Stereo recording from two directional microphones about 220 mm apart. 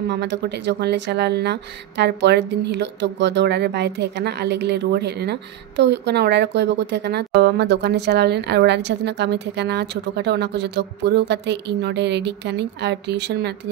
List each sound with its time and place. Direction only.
0.1 s speech: 50° right (ahead or behind)